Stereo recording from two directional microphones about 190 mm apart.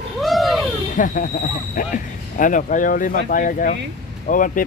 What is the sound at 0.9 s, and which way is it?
Speech, 45° left (ahead or behind).